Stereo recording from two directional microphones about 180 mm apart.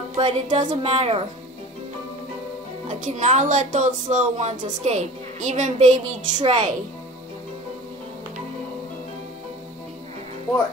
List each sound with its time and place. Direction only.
0.1 s speech: 40° right (ahead or behind)
2.9 s speech: 45° right (ahead or behind)